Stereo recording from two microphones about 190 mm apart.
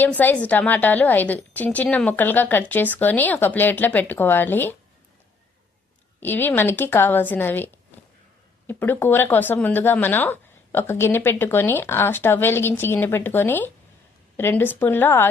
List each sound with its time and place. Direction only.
0.0 s speech: 10° left (ahead or behind)
6.1 s speech: 10° left (ahead or behind)